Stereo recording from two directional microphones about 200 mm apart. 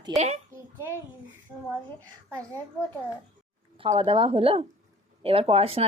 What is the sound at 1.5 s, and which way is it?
Speech, 15° right (ahead or behind).